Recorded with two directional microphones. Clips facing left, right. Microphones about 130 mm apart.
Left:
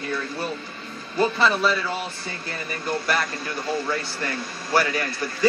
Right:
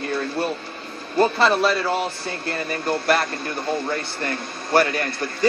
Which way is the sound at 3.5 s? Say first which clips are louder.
Right 1 dB; 25° right (ahead or behind).